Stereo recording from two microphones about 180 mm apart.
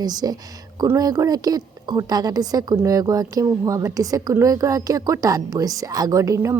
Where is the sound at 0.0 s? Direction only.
20° right (ahead or behind).